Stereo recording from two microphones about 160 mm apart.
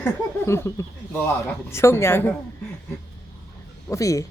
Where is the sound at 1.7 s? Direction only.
15° left (ahead or behind).